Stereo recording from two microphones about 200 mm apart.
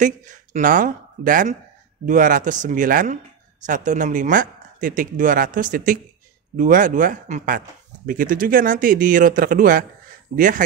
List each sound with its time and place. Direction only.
0.0 s speech: 40° right (ahead or behind)